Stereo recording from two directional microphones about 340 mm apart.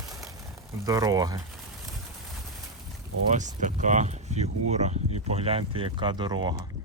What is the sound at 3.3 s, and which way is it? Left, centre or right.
Speech, right.